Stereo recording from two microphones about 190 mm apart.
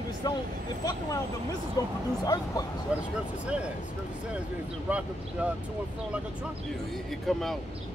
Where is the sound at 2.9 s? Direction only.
5° right (ahead or behind).